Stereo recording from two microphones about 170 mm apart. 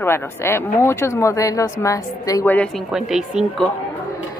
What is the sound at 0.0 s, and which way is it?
A woman's voice, 15° left (ahead or behind).